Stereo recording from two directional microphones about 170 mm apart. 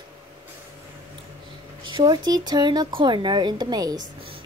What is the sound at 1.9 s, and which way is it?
A woman's voice, 25° right (ahead or behind).